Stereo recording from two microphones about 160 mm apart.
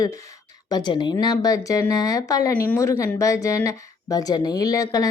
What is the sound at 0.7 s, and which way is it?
Speech, 25° left (ahead or behind).